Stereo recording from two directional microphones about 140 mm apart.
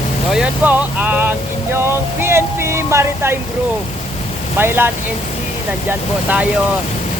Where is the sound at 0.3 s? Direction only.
10° right (ahead or behind).